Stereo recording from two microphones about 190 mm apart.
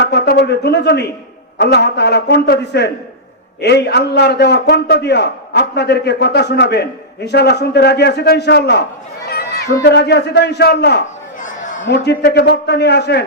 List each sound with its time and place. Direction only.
0.0 s a man's voice: 60° left (ahead or behind)